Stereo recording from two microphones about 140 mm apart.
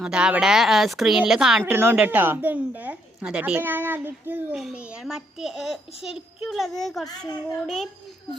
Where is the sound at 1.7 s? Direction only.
15° right (ahead or behind).